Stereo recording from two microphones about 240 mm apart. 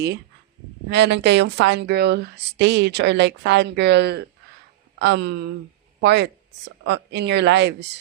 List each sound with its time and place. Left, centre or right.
0.9 s a woman's voice: right